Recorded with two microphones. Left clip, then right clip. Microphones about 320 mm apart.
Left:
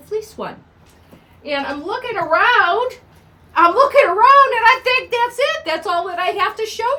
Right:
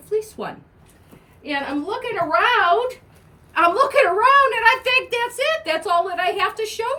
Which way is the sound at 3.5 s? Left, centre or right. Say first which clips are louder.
Left 5 dB; centre.